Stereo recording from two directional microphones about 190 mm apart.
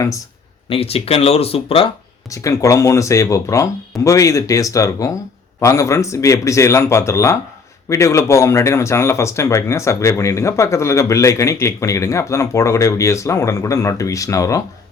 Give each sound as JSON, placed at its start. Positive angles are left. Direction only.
{"t": 0.7, "sound": "speech", "side_deg": 30}
{"t": 2.3, "sound": "speech", "side_deg": 15}